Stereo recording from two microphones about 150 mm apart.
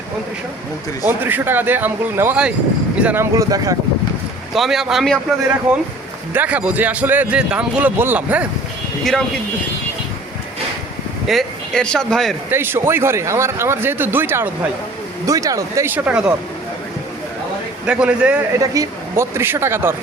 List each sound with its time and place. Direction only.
1.0 s a man's voice: 15° right (ahead or behind)
3.3 s speech: 20° right (ahead or behind)
4.5 s a man's voice: centre (ahead or behind)
11.3 s speech: centre (ahead or behind)
12.5 s a man's voice: 15° right (ahead or behind)
17.8 s a man's voice: 10° right (ahead or behind)
18.6 s a man's voice: 20° right (ahead or behind)